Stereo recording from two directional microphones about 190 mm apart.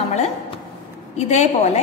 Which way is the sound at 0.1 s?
35° left (ahead or behind).